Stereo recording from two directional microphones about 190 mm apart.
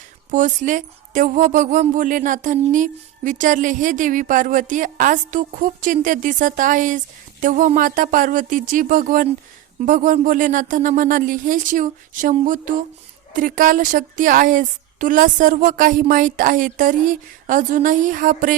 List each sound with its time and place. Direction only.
0.3 s speech: 40° right (ahead or behind)